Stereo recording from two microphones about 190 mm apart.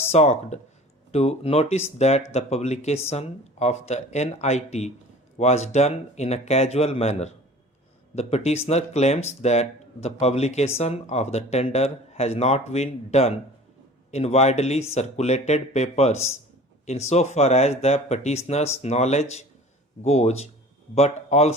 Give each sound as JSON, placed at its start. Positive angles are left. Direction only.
{"t": 0.1, "sound": "speech", "side_deg": 35}